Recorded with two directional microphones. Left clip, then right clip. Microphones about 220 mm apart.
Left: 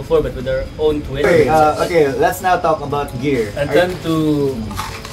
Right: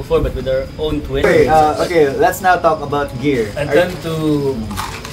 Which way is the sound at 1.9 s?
15° right (ahead or behind).